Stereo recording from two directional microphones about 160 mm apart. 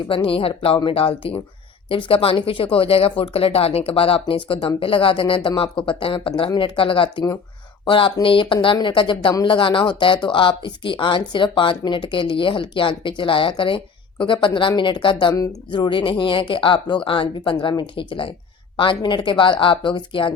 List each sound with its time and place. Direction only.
0.1 s speech: 35° left (ahead or behind)